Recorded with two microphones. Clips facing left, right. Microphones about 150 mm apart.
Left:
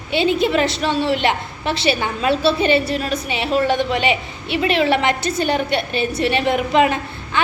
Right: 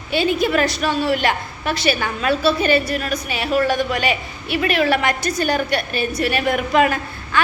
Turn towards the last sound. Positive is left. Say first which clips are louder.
# left 1 dB
turn(degrees=20)  # may be behind; listen again after turning